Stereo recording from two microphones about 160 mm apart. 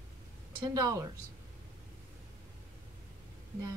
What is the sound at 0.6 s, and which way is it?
Speech, 20° right (ahead or behind).